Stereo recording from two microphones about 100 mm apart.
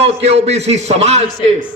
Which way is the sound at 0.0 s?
90° right.